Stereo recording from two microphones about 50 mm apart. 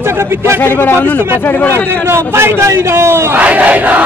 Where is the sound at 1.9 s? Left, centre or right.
Right.